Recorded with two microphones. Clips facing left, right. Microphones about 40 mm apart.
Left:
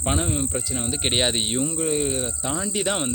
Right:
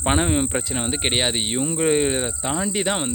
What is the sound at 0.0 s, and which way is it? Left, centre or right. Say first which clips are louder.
Speech: right 4 dB; right.